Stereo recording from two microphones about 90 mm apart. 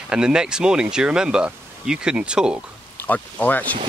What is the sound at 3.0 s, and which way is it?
Speech, 20° left (ahead or behind).